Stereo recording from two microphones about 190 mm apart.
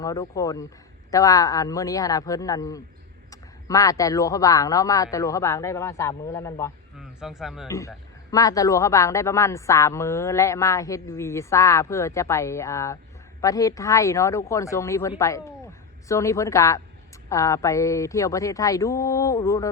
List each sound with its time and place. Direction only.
0.0 s a man's voice: 20° left (ahead or behind)
7.0 s speech: centre (ahead or behind)
7.7 s a man's voice: 15° left (ahead or behind)